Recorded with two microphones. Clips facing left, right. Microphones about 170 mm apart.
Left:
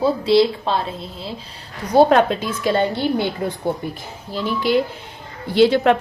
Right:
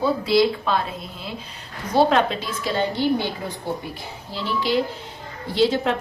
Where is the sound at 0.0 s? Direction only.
30° left (ahead or behind).